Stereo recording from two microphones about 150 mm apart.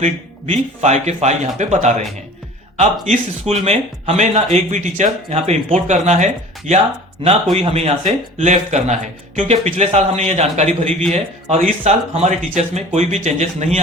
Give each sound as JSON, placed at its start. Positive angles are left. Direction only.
{"t": 0.0, "sound": "speech", "side_deg": -45}